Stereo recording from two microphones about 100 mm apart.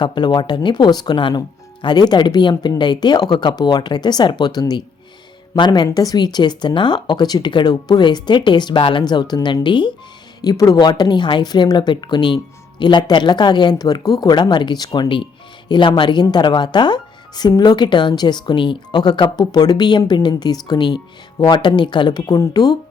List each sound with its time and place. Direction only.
0.0 s speech: 50° left (ahead or behind)
10.4 s speech: 40° left (ahead or behind)